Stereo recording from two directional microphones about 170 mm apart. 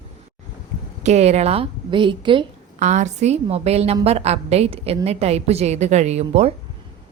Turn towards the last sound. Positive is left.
turn(degrees=-40)  # may be behind; listen again after turning